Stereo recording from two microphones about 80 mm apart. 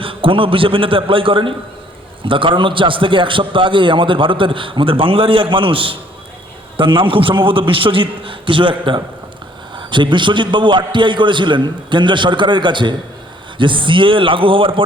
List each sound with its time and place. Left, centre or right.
0.0 s a man's voice: right
13.6 s a man's voice: right